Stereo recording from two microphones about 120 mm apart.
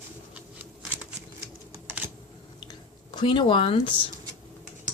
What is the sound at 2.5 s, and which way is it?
Drip, 40° left (ahead or behind).